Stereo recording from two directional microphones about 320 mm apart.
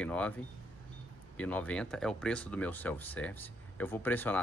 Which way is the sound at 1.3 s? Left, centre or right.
Centre.